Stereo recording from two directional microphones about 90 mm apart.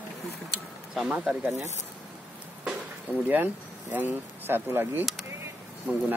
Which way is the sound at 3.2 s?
20° right (ahead or behind).